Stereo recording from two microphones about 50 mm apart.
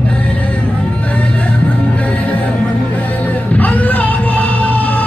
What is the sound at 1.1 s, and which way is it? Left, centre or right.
Music, left.